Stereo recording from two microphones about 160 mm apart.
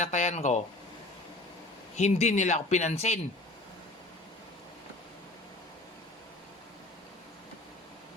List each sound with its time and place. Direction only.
0.0 s speech: 45° left (ahead or behind)
2.0 s speech: 45° left (ahead or behind)